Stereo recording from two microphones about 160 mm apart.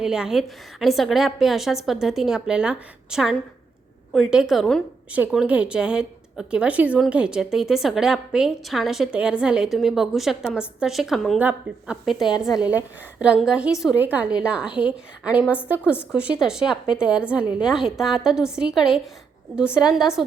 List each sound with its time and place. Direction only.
0.0 s a woman's voice: 5° right (ahead or behind)